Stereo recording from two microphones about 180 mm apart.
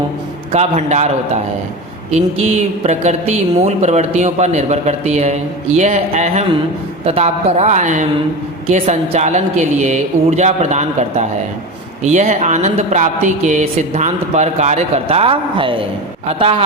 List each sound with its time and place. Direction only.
0.5 s a woman's voice: 35° right (ahead or behind)